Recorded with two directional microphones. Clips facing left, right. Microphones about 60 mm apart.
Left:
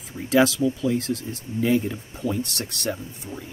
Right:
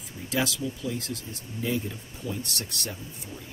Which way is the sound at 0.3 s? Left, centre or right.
Left.